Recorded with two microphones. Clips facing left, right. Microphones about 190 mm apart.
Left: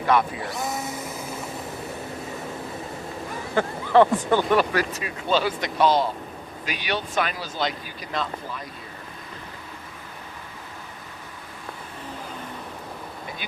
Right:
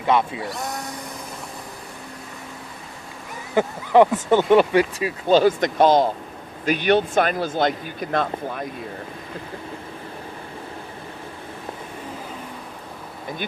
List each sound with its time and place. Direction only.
0.1 s speech: 25° right (ahead or behind)
0.4 s drill: centre (ahead or behind)
3.5 s speech: 15° right (ahead or behind)
5.3 s speech: 45° right (ahead or behind)